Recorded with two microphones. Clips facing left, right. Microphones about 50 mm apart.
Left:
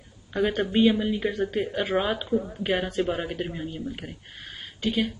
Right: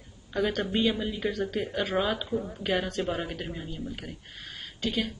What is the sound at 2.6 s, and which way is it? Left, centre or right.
A woman's voice, centre.